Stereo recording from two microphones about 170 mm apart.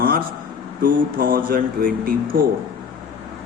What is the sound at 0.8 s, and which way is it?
A man's voice, 55° right (ahead or behind).